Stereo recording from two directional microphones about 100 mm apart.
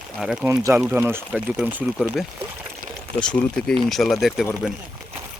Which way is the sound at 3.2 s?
5° left (ahead or behind).